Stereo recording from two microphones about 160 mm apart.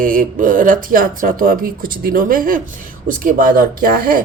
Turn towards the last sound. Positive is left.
turn(degrees=-60)  # may be behind; listen again after turning